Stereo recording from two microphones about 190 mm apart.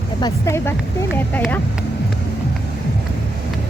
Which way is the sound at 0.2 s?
20° left (ahead or behind).